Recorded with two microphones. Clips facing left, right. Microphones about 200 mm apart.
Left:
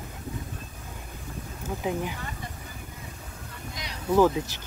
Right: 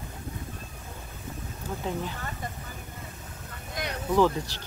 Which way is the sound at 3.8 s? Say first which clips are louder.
Right 9 dB; 55° right (ahead or behind).